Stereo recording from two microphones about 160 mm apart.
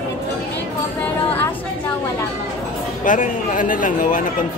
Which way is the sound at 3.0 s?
55° left (ahead or behind).